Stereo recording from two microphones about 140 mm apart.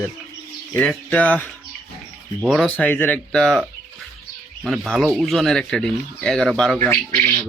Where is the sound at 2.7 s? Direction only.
15° left (ahead or behind).